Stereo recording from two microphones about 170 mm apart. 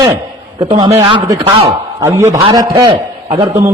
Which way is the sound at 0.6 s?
30° right (ahead or behind).